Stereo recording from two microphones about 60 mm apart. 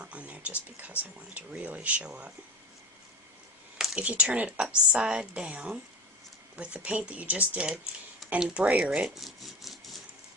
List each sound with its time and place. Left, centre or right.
0.0 s speech: right
3.9 s a woman's voice: right
8.6 s a woman's voice: right
9.0 s speech: centre